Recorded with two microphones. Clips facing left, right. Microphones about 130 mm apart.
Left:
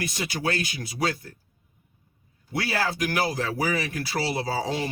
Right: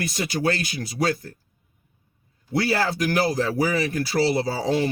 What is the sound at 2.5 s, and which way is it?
Speech, 35° right (ahead or behind).